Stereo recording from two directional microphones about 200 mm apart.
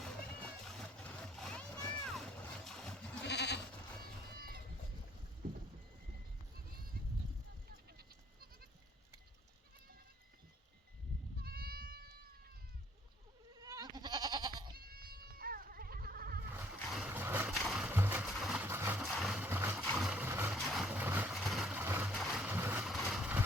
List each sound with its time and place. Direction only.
0.0 s a sound: centre (ahead or behind)
3.2 s goat: 55° left (ahead or behind)
4.4 s sheep: 50° right (ahead or behind)
7.9 s goat: 50° right (ahead or behind)
11.3 s goat: 50° right (ahead or behind)
13.6 s goat: 15° right (ahead or behind)
14.8 s goat: 50° right (ahead or behind)
16.8 s vehicle: centre (ahead or behind)
17.1 s vehicle: 10° right (ahead or behind)
17.5 s music: centre (ahead or behind)
17.8 s a sound: 10° right (ahead or behind)
19.8 s vehicle: centre (ahead or behind)
20.6 s vehicle: centre (ahead or behind)